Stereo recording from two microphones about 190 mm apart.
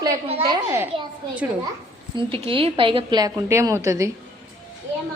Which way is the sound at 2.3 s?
30° right (ahead or behind).